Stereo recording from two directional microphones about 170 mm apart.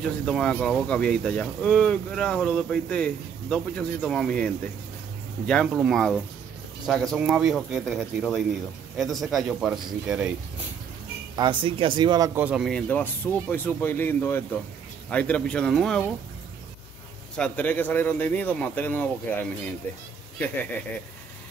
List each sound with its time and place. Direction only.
0.3 s speech: 5° left (ahead or behind)
5.7 s speech: 10° right (ahead or behind)
5.9 s speech: centre (ahead or behind)
11.3 s speech: 30° right (ahead or behind)
12.4 s speech: 5° right (ahead or behind)
17.4 s speech: 10° left (ahead or behind)